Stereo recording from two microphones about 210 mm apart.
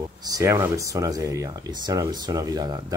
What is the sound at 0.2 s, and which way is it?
Speech, 15° right (ahead or behind).